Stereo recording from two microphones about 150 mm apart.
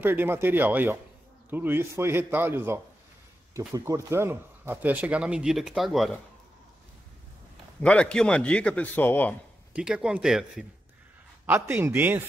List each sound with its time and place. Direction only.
0.0 s speech: 15° right (ahead or behind)
7.8 s speech: 5° left (ahead or behind)
9.8 s speech: 5° right (ahead or behind)
11.4 s speech: 15° right (ahead or behind)